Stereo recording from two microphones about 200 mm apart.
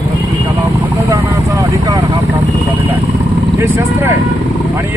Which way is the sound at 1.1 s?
15° right (ahead or behind).